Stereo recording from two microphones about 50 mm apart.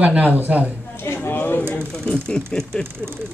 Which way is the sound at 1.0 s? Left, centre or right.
Left.